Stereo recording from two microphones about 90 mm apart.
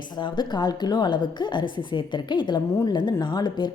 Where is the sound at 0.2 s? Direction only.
55° left (ahead or behind).